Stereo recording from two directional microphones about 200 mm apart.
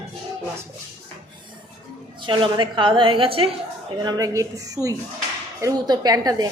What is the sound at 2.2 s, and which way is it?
A woman's voice, 25° right (ahead or behind).